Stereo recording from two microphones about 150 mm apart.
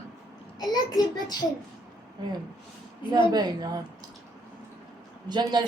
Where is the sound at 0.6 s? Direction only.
25° left (ahead or behind).